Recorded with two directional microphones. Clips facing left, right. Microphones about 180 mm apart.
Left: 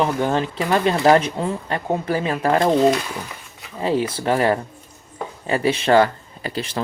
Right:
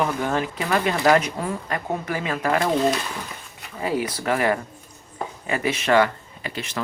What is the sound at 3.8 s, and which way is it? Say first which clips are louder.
Speech: left 4 dB; 25° left (ahead or behind).